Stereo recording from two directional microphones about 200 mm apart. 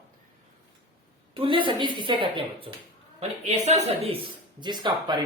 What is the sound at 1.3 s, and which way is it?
Speech, 25° right (ahead or behind).